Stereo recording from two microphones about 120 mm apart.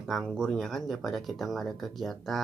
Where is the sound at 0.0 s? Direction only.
Centre (ahead or behind).